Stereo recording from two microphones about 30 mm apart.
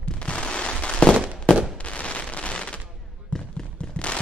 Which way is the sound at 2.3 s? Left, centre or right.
Left.